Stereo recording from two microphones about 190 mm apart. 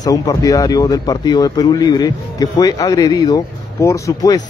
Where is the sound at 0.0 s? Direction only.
20° left (ahead or behind).